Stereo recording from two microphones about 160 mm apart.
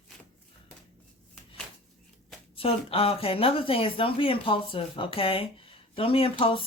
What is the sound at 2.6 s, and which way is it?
Speech, 35° left (ahead or behind).